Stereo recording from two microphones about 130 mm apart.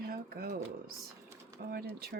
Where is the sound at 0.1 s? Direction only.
90° right.